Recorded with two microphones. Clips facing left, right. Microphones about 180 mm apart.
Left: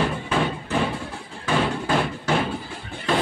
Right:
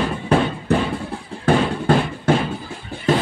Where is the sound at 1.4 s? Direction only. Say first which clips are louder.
Right 6 dB; 55° right (ahead or behind).